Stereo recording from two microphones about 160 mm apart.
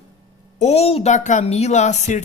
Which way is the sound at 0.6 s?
40° left (ahead or behind).